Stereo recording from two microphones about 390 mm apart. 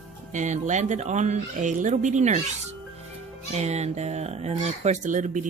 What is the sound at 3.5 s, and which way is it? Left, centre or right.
Speech, centre.